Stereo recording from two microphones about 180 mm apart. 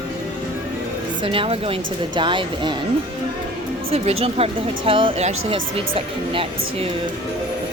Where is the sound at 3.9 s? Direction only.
35° right (ahead or behind).